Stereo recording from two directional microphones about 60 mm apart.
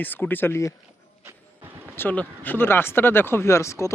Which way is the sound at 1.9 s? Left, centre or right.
Left.